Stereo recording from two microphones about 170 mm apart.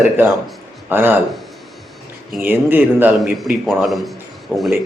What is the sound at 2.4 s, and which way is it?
Speech, 10° right (ahead or behind).